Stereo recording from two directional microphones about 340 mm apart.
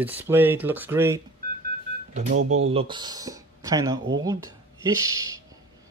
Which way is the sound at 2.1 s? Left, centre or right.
Right.